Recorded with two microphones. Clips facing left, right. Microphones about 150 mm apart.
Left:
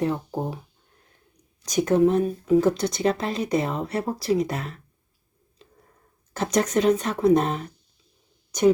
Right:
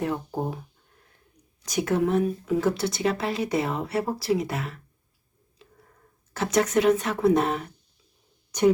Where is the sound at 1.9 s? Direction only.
30° left (ahead or behind).